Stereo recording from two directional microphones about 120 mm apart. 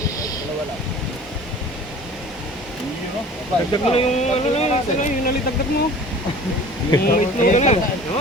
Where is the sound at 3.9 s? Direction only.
60° left (ahead or behind).